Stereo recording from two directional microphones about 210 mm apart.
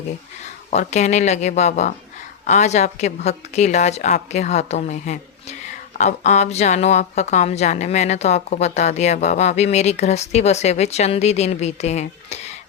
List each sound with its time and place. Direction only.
0.7 s a woman's voice: 35° left (ahead or behind)